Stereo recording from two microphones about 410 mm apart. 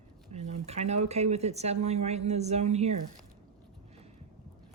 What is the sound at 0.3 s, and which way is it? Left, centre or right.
Speech, centre.